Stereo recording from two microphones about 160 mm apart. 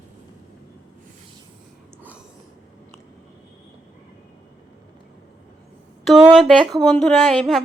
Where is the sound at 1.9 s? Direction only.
10° right (ahead or behind).